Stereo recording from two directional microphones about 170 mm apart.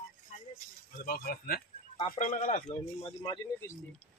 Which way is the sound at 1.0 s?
55° left (ahead or behind).